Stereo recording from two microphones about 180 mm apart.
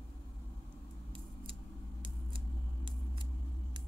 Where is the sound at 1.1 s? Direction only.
30° right (ahead or behind).